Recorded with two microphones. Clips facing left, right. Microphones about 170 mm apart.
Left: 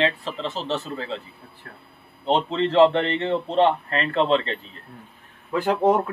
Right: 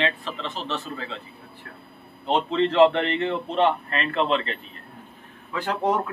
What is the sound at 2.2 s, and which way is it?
A man's voice, 30° left (ahead or behind).